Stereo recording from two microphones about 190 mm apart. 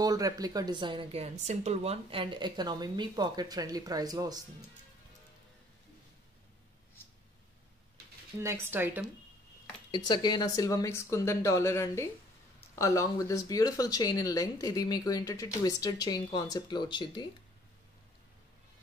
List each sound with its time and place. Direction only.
0.0 s a woman's voice: 20° right (ahead or behind)
8.4 s speech: 15° right (ahead or behind)
9.8 s speech: 25° left (ahead or behind)